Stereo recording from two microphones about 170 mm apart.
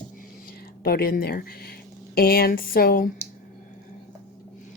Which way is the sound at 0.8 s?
60° left (ahead or behind).